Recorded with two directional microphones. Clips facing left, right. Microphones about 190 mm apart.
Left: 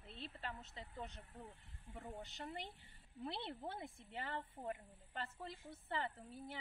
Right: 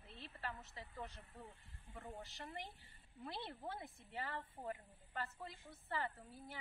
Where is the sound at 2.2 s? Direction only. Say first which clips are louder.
Left 2 dB; 20° left (ahead or behind).